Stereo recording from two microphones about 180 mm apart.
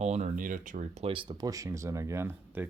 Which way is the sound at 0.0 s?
40° right (ahead or behind).